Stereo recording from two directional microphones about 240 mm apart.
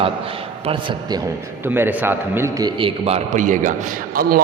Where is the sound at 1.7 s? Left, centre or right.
Centre; by 3.7 s right.